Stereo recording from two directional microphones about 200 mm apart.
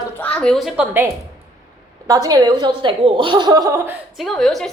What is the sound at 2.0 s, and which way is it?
A woman's voice, 20° right (ahead or behind).